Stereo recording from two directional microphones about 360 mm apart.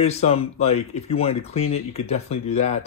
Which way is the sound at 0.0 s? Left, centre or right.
Centre.